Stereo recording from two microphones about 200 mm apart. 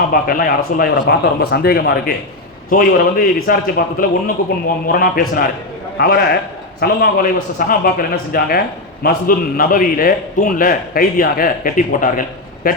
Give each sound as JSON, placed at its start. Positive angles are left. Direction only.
{"t": 0.1, "sound": "a man's voice", "side_deg": 45}